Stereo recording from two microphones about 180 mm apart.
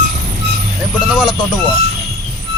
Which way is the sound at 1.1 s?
5° right (ahead or behind).